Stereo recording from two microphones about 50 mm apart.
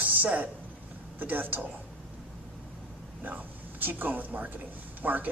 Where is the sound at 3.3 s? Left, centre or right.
Right.